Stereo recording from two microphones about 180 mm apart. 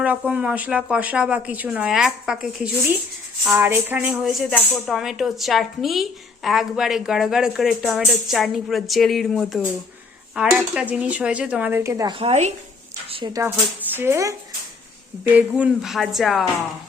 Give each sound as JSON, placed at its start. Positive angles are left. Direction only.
{"t": 0.0, "sound": "a woman's voice", "side_deg": -5}
{"t": 3.5, "sound": "a woman's voice", "side_deg": -10}
{"t": 12.2, "sound": "speech", "side_deg": -40}
{"t": 13.1, "sound": "a sound", "side_deg": -25}
{"t": 13.9, "sound": "a woman's voice", "side_deg": -15}